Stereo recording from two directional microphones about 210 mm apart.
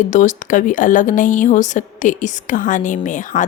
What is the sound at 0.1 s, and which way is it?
Speech, 35° left (ahead or behind).